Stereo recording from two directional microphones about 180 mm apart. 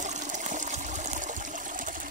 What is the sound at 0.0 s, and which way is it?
Water, 40° right (ahead or behind).